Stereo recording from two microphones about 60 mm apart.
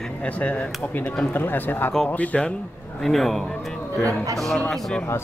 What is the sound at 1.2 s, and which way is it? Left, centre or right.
Speech, left.